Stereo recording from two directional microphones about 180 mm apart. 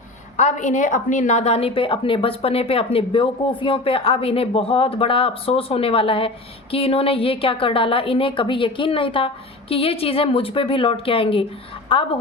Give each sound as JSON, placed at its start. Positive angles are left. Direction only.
{"t": 0.3, "sound": "a woman's voice", "side_deg": 40}